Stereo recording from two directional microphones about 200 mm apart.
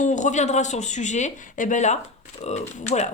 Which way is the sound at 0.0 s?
35° left (ahead or behind).